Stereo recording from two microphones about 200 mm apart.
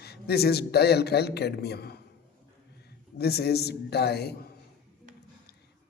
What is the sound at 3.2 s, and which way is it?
Speech, 55° left (ahead or behind).